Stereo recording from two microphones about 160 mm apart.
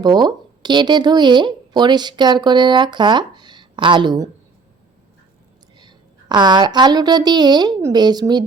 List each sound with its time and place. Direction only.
0.0 s speech: 25° right (ahead or behind)
5.7 s a woman's voice: 25° right (ahead or behind)